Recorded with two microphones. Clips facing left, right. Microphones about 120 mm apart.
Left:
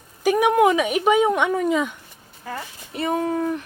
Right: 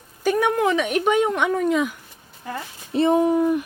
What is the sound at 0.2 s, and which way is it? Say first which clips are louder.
Speech: left 3 dB; 10° left (ahead or behind).